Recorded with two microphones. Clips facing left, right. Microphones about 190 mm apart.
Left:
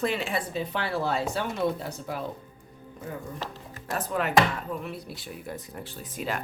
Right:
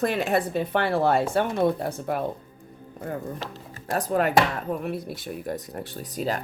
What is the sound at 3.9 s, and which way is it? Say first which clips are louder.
Speech: right 3 dB; 40° right (ahead or behind).